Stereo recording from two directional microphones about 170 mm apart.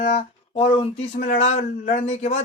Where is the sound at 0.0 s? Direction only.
35° left (ahead or behind).